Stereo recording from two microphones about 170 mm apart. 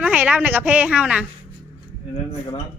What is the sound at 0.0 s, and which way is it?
A woman's voice, 10° right (ahead or behind).